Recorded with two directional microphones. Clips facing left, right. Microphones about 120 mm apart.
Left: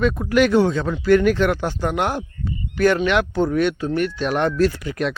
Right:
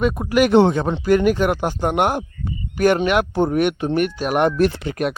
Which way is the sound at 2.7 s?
15° right (ahead or behind).